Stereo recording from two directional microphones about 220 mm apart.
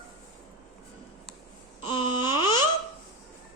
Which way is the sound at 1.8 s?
20° left (ahead or behind).